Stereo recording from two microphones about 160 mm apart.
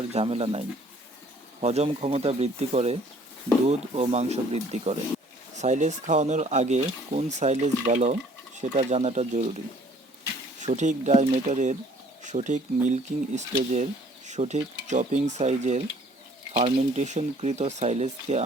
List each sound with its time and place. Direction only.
0.1 s speech: 40° right (ahead or behind)
1.6 s speech: 40° right (ahead or behind)
10.6 s speech: 50° right (ahead or behind)